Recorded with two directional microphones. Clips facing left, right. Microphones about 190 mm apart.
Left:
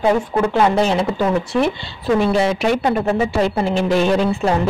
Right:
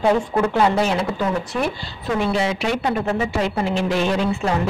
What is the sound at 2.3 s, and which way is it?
Speech, 40° left (ahead or behind).